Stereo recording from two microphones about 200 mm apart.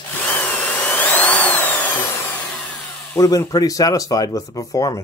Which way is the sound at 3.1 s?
15° left (ahead or behind).